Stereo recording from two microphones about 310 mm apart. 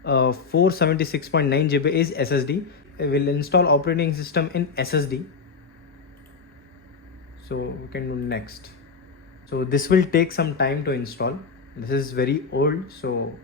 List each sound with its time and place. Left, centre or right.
0.0 s speech: left
7.4 s speech: left